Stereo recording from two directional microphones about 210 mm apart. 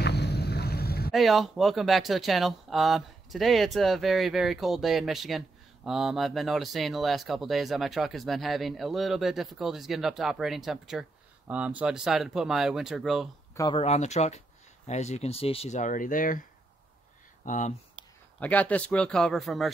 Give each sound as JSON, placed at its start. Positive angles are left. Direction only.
{"t": 0.0, "sound": "boat", "side_deg": 50}
{"t": 1.1, "sound": "speech", "side_deg": 0}
{"t": 13.6, "sound": "speech", "side_deg": 20}
{"t": 13.8, "sound": "speech", "side_deg": 35}
{"t": 17.5, "sound": "speech", "side_deg": 35}
{"t": 18.4, "sound": "speech", "side_deg": 5}